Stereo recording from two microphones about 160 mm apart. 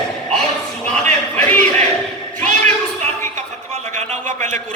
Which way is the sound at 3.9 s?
50° right (ahead or behind).